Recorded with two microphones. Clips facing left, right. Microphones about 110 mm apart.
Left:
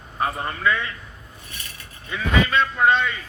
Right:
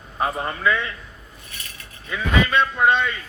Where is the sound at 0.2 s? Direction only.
15° right (ahead or behind).